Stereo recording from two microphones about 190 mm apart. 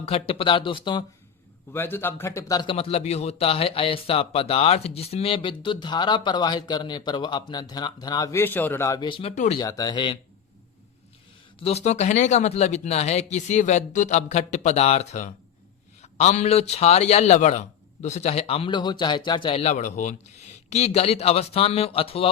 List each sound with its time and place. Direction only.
0.0 s a man's voice: 30° left (ahead or behind)
1.7 s a man's voice: 10° left (ahead or behind)
9.3 s a man's voice: 40° left (ahead or behind)
9.6 s a man's voice: 20° left (ahead or behind)
11.6 s a man's voice: 35° left (ahead or behind)